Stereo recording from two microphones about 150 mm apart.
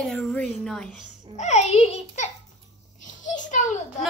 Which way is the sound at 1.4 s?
50° left (ahead or behind).